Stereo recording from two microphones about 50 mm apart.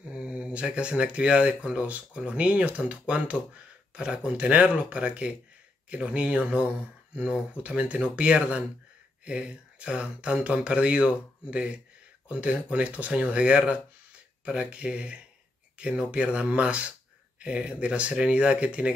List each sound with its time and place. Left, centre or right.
0.1 s speech: right